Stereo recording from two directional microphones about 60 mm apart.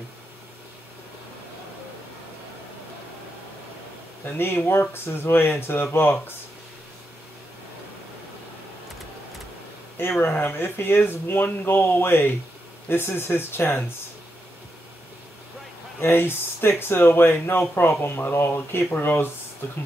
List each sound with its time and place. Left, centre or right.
4.3 s speech: left
10.3 s speech: left
16.0 s speech: left